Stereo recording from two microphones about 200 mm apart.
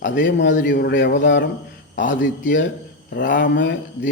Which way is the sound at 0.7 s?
55° left (ahead or behind).